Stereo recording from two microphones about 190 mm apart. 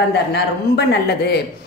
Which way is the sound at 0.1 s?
60° left (ahead or behind).